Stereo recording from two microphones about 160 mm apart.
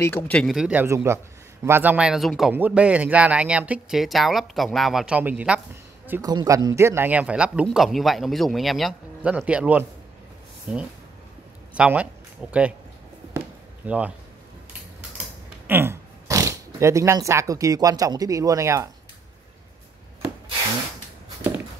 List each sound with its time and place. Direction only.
0.0 s a man's voice: 10° left (ahead or behind); by 5.6 s 10° right (ahead or behind)
6.2 s a man's voice: 20° right (ahead or behind)
13.8 s speech: 10° right (ahead or behind)
15.6 s speech: 15° right (ahead or behind)